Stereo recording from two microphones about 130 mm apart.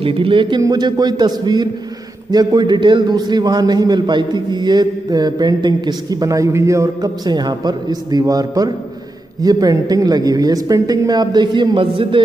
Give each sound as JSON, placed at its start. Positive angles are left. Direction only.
{"t": 0.0, "sound": "a man's voice", "side_deg": -45}